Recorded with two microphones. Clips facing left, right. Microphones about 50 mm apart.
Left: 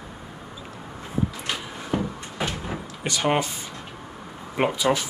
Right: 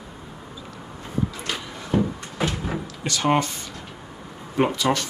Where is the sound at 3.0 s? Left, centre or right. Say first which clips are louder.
Right 2 dB; centre.